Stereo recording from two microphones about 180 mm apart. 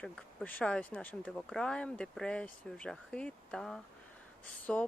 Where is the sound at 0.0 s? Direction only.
5° left (ahead or behind).